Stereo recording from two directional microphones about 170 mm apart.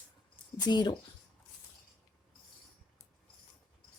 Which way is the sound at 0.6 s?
25° left (ahead or behind).